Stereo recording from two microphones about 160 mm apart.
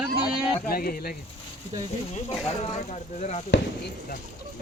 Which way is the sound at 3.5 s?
90° left.